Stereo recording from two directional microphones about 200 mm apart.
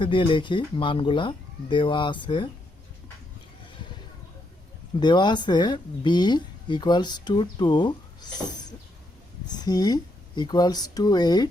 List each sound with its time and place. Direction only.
0.0 s speech: 25° left (ahead or behind)
4.9 s speech: 20° left (ahead or behind)
9.6 s speech: 20° left (ahead or behind)